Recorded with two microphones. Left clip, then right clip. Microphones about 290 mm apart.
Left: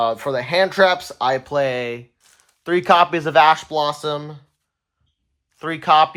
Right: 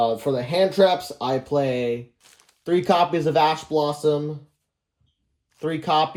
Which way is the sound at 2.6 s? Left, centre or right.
Left.